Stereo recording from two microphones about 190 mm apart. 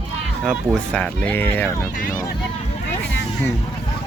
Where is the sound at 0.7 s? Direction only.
5° left (ahead or behind).